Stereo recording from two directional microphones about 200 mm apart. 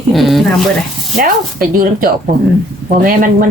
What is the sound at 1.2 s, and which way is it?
Speech, 45° right (ahead or behind).